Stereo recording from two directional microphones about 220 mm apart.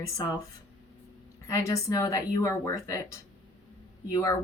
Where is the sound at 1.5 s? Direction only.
15° left (ahead or behind).